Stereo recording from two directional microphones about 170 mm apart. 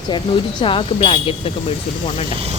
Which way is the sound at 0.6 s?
35° left (ahead or behind).